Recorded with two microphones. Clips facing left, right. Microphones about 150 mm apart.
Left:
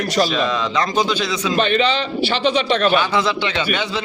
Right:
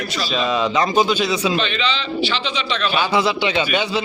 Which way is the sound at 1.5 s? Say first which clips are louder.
Left 5 dB; 50° left (ahead or behind).